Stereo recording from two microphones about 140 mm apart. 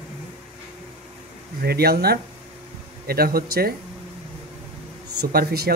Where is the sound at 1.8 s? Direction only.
90° right.